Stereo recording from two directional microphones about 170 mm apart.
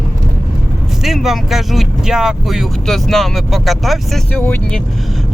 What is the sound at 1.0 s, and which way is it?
Speech, centre (ahead or behind).